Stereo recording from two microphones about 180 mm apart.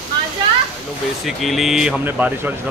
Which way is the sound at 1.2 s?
Centre (ahead or behind).